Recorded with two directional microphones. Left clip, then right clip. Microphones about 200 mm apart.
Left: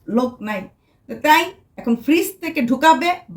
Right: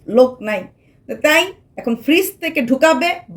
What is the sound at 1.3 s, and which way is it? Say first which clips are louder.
Speech: left 3 dB; 5° right (ahead or behind).